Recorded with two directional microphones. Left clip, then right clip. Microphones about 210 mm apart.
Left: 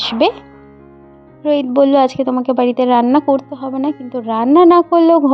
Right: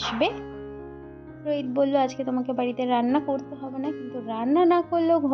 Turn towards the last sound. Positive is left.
turn(degrees=40)  # may be behind; listen again after turning